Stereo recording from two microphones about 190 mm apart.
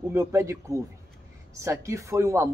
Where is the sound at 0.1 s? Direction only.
15° right (ahead or behind).